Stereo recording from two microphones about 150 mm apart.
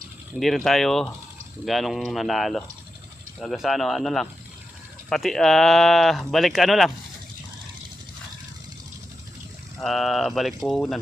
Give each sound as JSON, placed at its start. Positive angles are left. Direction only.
{"t": 0.3, "sound": "speech", "side_deg": 0}
{"t": 9.7, "sound": "speech", "side_deg": 0}